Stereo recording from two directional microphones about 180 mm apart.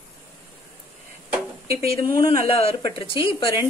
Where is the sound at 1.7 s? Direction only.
60° right (ahead or behind).